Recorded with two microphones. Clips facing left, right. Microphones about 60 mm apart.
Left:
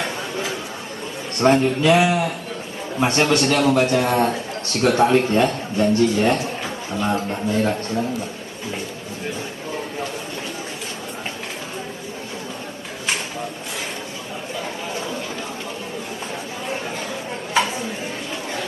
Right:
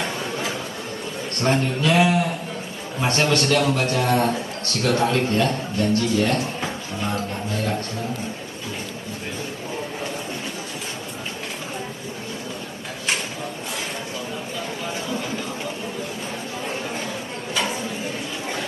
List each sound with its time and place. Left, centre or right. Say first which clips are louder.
1.4 s a man's voice: left 6 dB; left
3.0 s a man's voice: left 3 dB; left